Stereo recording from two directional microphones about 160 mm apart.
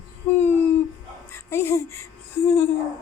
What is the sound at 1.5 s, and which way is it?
Speech, 15° left (ahead or behind).